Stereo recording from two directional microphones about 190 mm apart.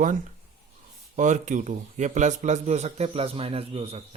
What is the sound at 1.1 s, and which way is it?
A man's voice, 40° right (ahead or behind).